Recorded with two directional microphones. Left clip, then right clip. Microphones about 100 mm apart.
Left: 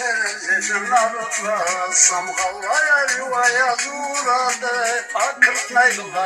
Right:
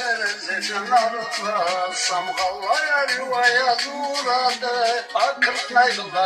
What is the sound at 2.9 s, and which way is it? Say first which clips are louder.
Speech: left 3 dB; 50° right (ahead or behind).